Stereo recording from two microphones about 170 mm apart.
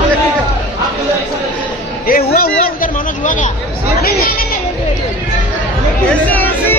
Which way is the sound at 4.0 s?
60° left (ahead or behind).